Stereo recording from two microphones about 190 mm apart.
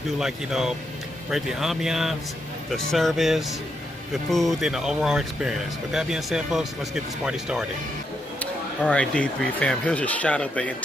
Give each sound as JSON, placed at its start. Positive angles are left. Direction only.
{"t": 0.2, "sound": "speech", "side_deg": -5}